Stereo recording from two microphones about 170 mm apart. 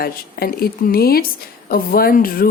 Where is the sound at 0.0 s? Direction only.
60° left (ahead or behind).